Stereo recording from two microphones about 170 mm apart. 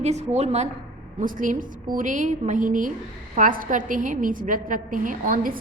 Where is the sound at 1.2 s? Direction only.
50° right (ahead or behind).